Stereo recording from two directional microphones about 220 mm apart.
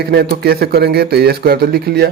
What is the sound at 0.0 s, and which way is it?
Speech, 45° right (ahead or behind).